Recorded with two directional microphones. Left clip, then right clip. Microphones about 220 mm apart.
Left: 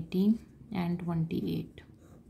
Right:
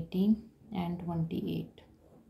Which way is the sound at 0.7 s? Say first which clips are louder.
Left 2 dB; 45° left (ahead or behind).